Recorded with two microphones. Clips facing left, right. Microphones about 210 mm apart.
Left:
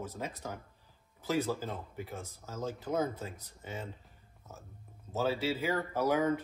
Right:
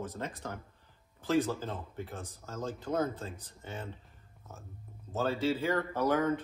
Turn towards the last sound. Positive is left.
turn(degrees=10)  # may be behind; listen again after turning